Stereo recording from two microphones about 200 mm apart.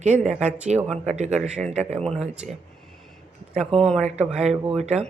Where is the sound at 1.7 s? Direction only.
35° right (ahead or behind).